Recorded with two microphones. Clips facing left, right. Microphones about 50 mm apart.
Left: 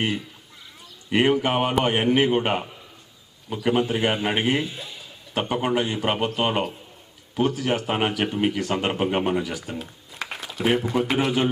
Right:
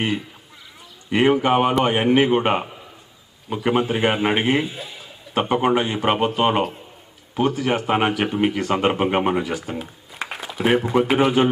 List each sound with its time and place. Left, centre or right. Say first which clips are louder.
0.0 s a man's voice: right 2 dB; centre
7.7 s a man's voice: right 4 dB; right
9.7 s speech: right 3 dB; centre